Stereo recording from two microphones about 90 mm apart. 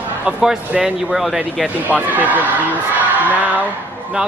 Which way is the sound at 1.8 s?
20° right (ahead or behind).